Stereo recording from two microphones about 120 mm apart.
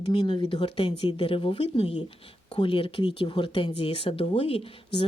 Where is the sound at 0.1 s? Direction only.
40° left (ahead or behind).